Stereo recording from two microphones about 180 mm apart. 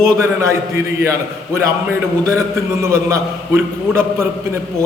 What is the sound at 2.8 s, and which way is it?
A man's voice, 15° right (ahead or behind).